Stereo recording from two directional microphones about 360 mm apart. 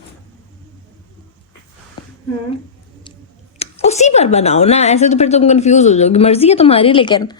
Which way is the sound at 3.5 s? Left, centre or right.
Centre.